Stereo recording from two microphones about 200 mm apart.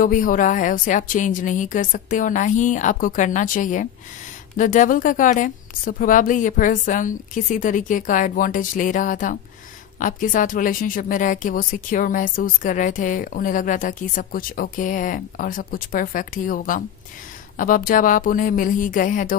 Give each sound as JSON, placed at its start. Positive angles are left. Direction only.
{"t": 0.0, "sound": "a woman's voice", "side_deg": 40}